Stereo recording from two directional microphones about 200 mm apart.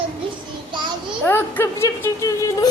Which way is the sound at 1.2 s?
10° left (ahead or behind).